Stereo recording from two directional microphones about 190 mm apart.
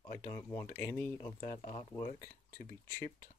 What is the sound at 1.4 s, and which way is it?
Speech, 40° left (ahead or behind).